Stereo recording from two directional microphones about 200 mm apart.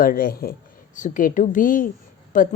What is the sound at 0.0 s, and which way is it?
A woman's voice, 45° left (ahead or behind).